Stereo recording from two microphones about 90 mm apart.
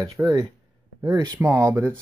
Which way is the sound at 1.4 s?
30° right (ahead or behind).